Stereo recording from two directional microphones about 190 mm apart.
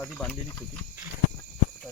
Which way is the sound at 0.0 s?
5° left (ahead or behind).